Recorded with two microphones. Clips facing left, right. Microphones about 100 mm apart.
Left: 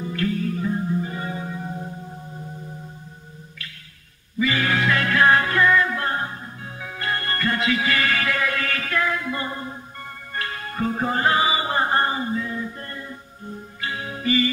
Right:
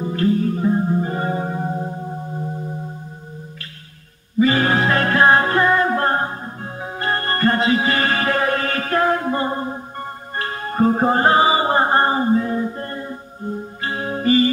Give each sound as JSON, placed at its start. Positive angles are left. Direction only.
{"t": 0.0, "sound": "music", "side_deg": -35}
{"t": 4.4, "sound": "music", "side_deg": -40}